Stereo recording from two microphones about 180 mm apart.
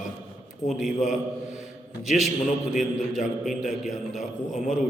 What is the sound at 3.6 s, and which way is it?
Speech, 40° left (ahead or behind).